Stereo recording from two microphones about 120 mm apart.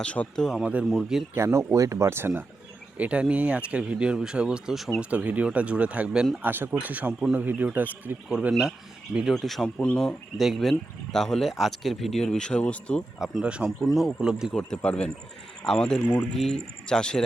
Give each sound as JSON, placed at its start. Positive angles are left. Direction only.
{"t": 0.0, "sound": "a man's voice", "side_deg": 10}
{"t": 0.6, "sound": "speech", "side_deg": -10}
{"t": 1.4, "sound": "a man's voice", "side_deg": -25}
{"t": 10.3, "sound": "speech", "side_deg": 0}
{"t": 13.1, "sound": "speech", "side_deg": -5}
{"t": 14.5, "sound": "a man's voice", "side_deg": 5}